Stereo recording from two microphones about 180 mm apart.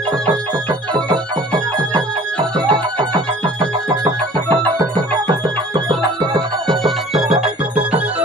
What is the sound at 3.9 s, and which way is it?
Music, 20° right (ahead or behind).